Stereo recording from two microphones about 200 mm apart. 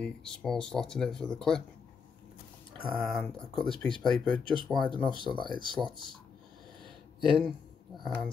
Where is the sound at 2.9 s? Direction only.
5° left (ahead or behind).